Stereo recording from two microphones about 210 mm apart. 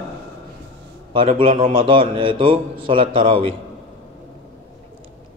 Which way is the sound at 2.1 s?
25° right (ahead or behind).